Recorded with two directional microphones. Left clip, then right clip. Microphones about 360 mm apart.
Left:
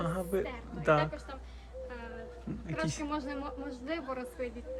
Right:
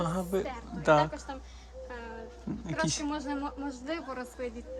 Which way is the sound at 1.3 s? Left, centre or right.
Right.